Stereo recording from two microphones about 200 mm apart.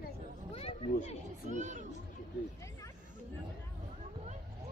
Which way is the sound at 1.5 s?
40° right (ahead or behind).